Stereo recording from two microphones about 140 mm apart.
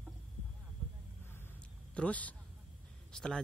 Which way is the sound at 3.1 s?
5° left (ahead or behind).